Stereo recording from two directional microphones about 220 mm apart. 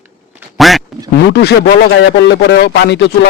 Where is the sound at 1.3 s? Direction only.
50° left (ahead or behind).